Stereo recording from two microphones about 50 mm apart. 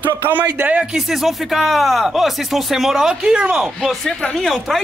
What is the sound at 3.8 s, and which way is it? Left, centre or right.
Speech, centre.